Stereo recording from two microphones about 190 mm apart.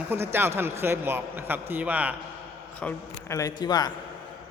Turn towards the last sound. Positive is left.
turn(degrees=20)  # may be behind; listen again after turning